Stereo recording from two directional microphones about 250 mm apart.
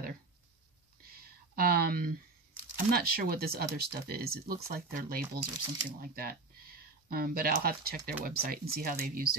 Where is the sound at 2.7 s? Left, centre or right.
Right.